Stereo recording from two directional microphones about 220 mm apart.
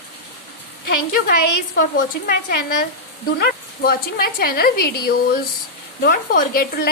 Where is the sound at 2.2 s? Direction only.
45° left (ahead or behind).